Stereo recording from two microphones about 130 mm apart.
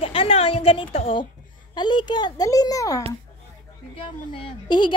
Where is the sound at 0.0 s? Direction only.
45° left (ahead or behind).